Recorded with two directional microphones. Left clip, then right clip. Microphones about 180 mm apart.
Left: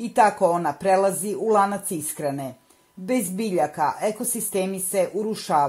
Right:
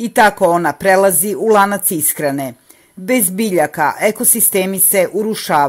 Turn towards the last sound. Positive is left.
turn(degrees=-35)  # may be behind; listen again after turning